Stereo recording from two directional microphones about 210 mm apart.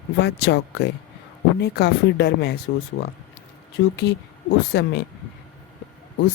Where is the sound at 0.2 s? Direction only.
55° left (ahead or behind).